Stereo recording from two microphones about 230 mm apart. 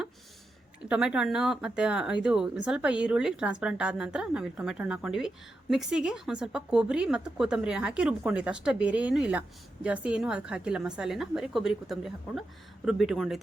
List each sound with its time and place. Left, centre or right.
0.9 s speech: centre